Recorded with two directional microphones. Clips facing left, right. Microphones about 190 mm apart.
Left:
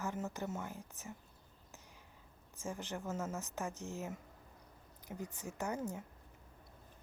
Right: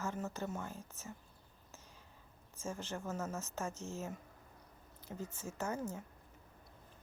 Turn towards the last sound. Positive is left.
turn(degrees=15)  # may be behind; listen again after turning